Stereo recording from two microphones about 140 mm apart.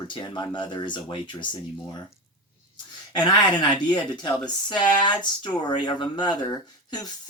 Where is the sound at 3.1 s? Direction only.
30° left (ahead or behind).